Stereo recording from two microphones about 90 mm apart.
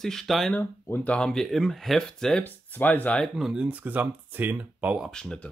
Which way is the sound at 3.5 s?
15° right (ahead or behind).